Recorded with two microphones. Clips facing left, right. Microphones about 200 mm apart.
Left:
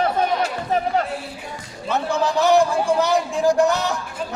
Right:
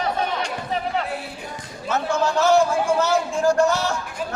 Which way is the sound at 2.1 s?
15° left (ahead or behind).